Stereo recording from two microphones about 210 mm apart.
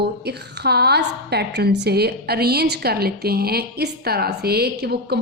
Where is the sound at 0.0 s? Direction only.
50° right (ahead or behind).